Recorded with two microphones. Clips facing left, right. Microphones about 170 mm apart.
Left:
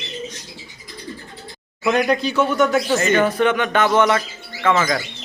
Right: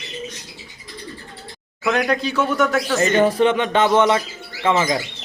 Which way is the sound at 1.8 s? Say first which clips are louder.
Left 2 dB; centre (ahead or behind).